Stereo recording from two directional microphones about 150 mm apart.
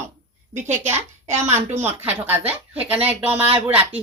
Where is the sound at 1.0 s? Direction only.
50° right (ahead or behind).